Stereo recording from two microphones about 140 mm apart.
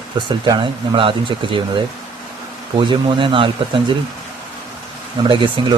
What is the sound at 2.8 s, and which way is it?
Speech, 35° right (ahead or behind).